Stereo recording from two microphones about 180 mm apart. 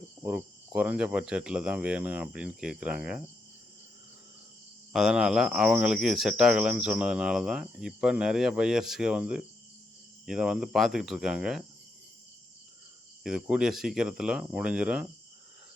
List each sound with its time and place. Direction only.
0.2 s speech: 10° right (ahead or behind)
4.9 s speech: 5° right (ahead or behind)
13.2 s speech: 5° right (ahead or behind)